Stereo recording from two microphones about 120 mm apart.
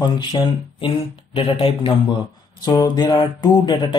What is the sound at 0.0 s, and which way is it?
Speech, 40° left (ahead or behind).